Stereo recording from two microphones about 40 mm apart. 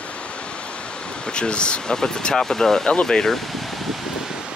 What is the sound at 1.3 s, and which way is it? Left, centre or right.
Speech, left.